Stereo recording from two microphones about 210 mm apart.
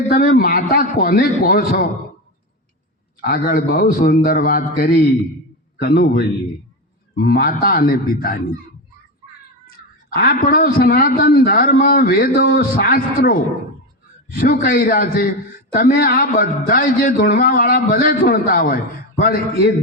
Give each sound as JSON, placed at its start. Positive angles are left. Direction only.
{"t": 0.1, "sound": "a man's voice", "side_deg": 45}
{"t": 3.2, "sound": "a man's voice", "side_deg": 45}
{"t": 9.7, "sound": "a man's voice", "side_deg": 45}